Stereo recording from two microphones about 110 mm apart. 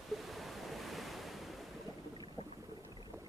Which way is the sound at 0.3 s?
Centre (ahead or behind).